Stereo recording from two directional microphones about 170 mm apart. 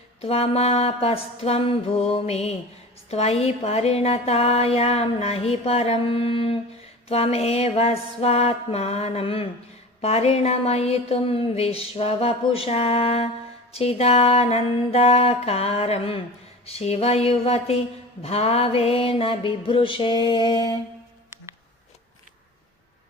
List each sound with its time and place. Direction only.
0.2 s speech: 35° left (ahead or behind)